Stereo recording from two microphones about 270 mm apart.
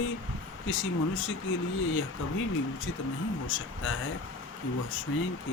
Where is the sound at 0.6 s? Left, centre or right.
Left.